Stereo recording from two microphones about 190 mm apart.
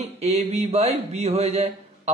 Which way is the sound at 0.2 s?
35° right (ahead or behind).